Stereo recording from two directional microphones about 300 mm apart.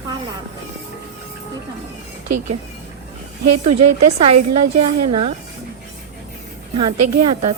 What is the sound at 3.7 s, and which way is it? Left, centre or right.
Speech, right.